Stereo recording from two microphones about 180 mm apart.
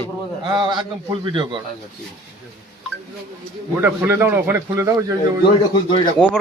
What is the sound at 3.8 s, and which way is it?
A man's voice, 10° right (ahead or behind).